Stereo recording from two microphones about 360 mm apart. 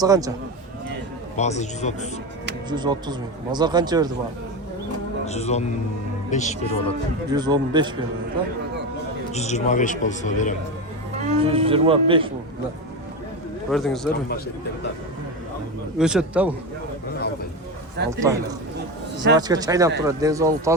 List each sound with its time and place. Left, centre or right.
0.0 s speech: centre
1.4 s a man's voice: centre
2.6 s speech: centre
5.2 s a man's voice: centre
7.3 s speech: centre
9.3 s a man's voice: centre
11.2 s speech: centre
13.7 s speech: centre
14.1 s a man's voice: left
16.0 s speech: centre
18.0 s a man's voice: right
19.4 s speech: centre